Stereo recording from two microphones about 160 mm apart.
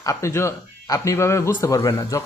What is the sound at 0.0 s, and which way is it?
A man's voice, 20° left (ahead or behind).